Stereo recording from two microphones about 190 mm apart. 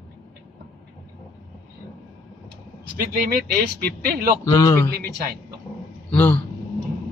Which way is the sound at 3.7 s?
50° right (ahead or behind).